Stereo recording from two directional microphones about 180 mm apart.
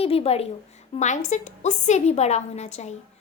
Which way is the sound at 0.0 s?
35° left (ahead or behind).